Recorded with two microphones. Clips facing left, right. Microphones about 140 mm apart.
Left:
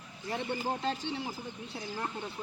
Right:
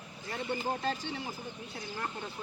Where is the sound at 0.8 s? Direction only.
20° left (ahead or behind).